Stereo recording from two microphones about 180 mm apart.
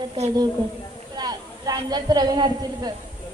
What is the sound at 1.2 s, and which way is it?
A woman's voice, 20° right (ahead or behind).